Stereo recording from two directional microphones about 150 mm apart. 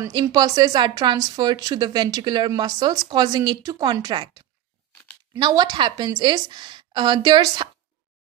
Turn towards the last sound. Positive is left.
turn(degrees=-30)  # may be behind; listen again after turning